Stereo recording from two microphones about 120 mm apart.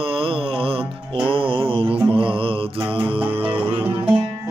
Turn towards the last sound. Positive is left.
turn(degrees=-20)  # may be behind; listen again after turning